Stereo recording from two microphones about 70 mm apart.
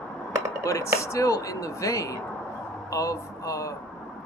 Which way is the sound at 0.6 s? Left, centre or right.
Left.